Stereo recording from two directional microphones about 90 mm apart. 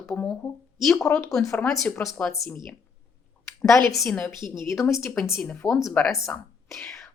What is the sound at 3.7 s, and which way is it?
Speech, centre (ahead or behind).